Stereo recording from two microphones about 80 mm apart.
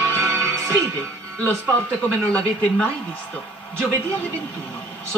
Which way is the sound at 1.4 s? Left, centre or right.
Centre.